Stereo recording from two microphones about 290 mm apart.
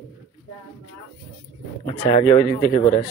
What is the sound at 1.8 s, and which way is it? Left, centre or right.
Speech, centre.